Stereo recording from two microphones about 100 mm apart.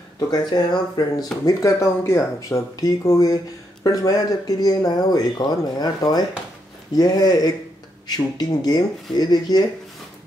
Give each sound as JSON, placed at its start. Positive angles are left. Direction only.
{"t": 0.3, "sound": "speech", "side_deg": 45}